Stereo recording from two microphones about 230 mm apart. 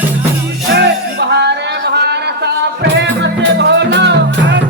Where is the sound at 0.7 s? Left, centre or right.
Right.